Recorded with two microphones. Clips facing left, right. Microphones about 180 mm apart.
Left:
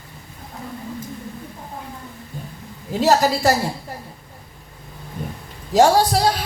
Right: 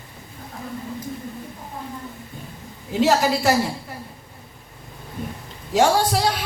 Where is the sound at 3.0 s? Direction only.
40° left (ahead or behind).